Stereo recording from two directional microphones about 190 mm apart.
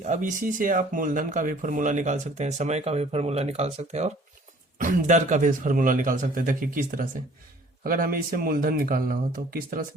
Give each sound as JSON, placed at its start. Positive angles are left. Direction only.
{"t": 0.0, "sound": "speech", "side_deg": -40}